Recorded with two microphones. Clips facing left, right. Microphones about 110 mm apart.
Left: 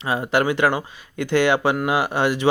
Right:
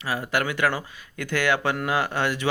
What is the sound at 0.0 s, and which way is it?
Speech, 20° left (ahead or behind).